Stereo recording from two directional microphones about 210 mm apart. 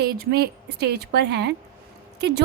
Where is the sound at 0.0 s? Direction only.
50° right (ahead or behind).